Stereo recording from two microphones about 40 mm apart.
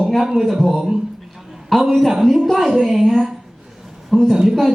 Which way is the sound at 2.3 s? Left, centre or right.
Centre.